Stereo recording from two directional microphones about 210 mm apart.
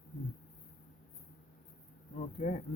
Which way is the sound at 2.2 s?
35° left (ahead or behind).